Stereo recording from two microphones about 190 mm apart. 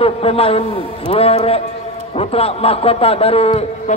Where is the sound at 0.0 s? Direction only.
30° left (ahead or behind).